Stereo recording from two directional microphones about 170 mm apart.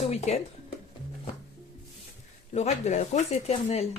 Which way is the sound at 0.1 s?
40° left (ahead or behind).